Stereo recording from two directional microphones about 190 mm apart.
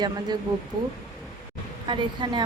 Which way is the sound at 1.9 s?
25° right (ahead or behind).